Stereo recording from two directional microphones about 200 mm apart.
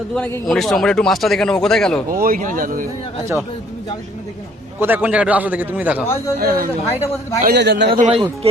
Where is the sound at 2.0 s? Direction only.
45° right (ahead or behind).